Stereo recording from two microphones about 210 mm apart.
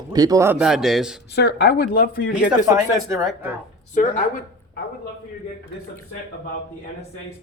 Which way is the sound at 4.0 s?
40° left (ahead or behind).